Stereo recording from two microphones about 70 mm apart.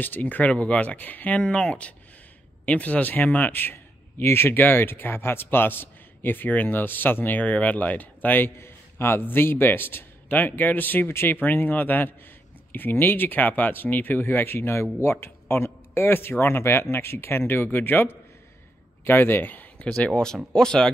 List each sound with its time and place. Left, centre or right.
0.0 s a man's voice: left
1.4 s a man's voice: centre
19.8 s speech: centre